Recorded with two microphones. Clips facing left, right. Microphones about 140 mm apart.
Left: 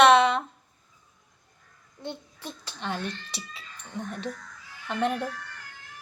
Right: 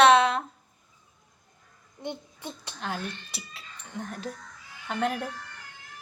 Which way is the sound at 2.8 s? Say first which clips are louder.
Left 2 dB; centre (ahead or behind).